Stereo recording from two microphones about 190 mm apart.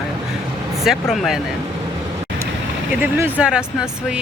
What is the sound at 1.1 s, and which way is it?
Speech, centre (ahead or behind).